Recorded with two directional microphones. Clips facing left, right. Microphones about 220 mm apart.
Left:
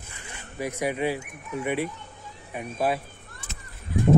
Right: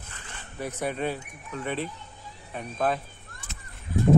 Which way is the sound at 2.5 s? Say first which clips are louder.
Left 1 dB; 10° left (ahead or behind).